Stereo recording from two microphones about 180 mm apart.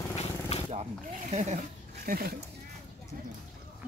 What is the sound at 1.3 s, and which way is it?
Speech, 40° right (ahead or behind).